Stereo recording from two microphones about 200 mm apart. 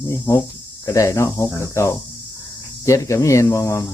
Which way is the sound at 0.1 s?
15° left (ahead or behind).